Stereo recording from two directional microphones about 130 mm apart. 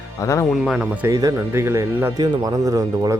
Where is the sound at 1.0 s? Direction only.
25° right (ahead or behind).